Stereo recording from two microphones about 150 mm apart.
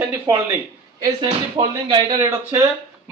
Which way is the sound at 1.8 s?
35° right (ahead or behind).